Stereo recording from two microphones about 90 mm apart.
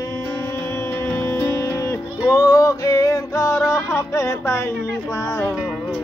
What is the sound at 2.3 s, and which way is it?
Music, 40° left (ahead or behind).